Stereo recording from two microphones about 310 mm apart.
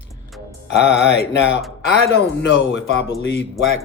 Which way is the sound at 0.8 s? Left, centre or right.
Left.